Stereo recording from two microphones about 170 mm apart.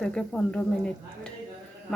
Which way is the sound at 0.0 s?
5° left (ahead or behind).